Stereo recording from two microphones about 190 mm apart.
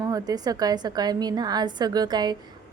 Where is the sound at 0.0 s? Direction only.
20° right (ahead or behind).